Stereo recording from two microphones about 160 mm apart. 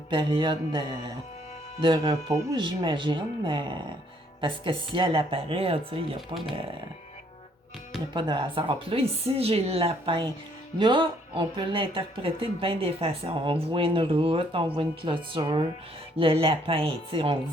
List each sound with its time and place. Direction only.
0.1 s speech: 30° right (ahead or behind)
6.1 s speech: centre (ahead or behind)
8.1 s speech: 30° right (ahead or behind)